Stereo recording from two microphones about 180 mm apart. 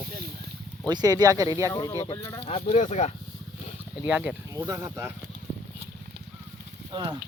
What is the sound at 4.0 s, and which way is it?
Speech, 10° right (ahead or behind).